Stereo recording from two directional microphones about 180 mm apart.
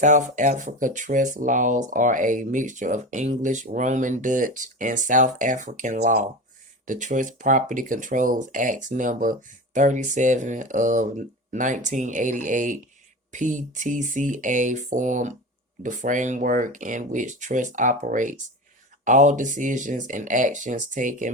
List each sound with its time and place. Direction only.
0.0 s speech: 45° right (ahead or behind)